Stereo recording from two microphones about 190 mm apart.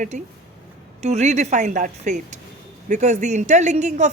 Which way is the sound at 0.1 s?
40° right (ahead or behind).